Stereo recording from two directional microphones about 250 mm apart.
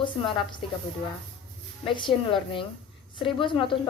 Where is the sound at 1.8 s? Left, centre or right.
Centre.